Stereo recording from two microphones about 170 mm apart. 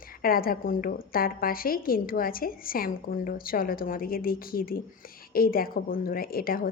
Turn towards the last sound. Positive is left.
turn(degrees=60)  # may be behind; listen again after turning